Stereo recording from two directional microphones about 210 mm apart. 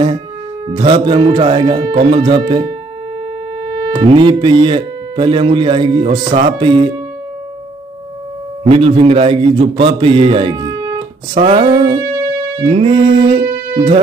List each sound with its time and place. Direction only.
0.7 s speech: 20° right (ahead or behind)
3.9 s speech: 25° right (ahead or behind)
8.6 s a man's voice: 25° right (ahead or behind)
11.4 s music: 30° right (ahead or behind)
12.6 s speech: 30° right (ahead or behind)